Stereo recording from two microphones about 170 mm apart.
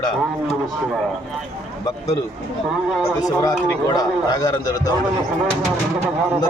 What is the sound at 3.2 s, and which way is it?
A man's voice, 20° left (ahead or behind).